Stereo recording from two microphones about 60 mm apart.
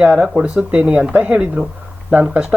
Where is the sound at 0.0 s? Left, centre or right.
Centre.